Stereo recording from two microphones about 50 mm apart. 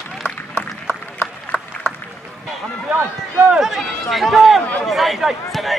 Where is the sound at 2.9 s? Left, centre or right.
Right.